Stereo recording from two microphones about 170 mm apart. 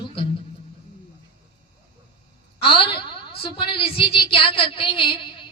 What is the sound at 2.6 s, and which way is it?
A woman's voice, 30° left (ahead or behind).